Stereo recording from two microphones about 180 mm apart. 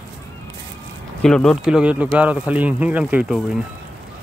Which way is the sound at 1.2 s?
5° left (ahead or behind).